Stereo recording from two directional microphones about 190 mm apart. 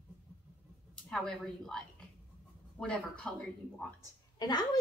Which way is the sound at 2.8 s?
5° left (ahead or behind).